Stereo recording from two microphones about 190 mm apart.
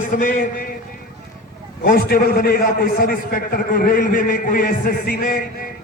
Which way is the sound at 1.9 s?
50° left (ahead or behind).